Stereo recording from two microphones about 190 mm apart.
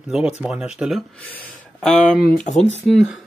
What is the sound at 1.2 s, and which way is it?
Speech, 10° left (ahead or behind).